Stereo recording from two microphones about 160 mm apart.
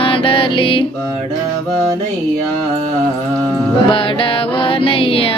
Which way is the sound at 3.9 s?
35° left (ahead or behind).